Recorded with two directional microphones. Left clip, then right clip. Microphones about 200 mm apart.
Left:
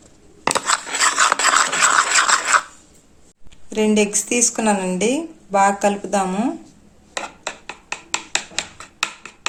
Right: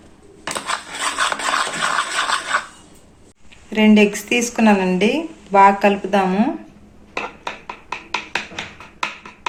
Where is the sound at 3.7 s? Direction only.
45° left (ahead or behind).